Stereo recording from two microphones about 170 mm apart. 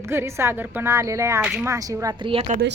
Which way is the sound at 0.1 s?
15° right (ahead or behind).